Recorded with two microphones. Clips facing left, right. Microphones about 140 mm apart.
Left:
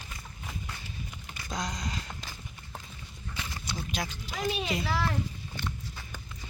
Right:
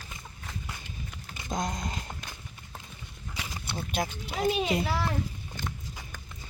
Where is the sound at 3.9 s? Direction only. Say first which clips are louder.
Right 7 dB; 55° right (ahead or behind).